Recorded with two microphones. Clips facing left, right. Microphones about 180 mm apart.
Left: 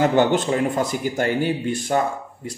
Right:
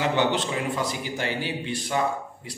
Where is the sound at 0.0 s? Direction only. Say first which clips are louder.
Left 6 dB; 45° left (ahead or behind).